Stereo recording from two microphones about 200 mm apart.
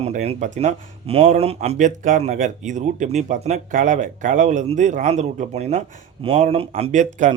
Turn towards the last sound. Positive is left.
turn(degrees=-35)  # may be behind; listen again after turning